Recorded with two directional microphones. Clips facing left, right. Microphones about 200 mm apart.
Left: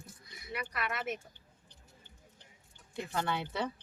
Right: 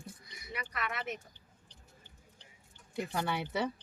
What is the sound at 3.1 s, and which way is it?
Speech, 10° right (ahead or behind).